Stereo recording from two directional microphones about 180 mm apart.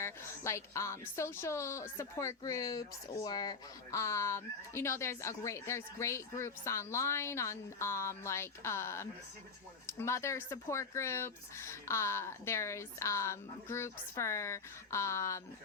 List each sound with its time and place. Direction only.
0.0 s speech: 15° left (ahead or behind)